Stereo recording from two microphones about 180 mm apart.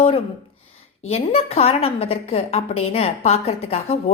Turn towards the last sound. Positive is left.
turn(degrees=35)  # may be behind; listen again after turning